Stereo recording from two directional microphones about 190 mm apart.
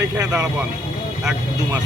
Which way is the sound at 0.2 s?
15° right (ahead or behind).